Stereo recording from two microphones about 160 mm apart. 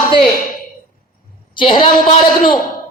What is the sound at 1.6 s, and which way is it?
Speech, 30° left (ahead or behind).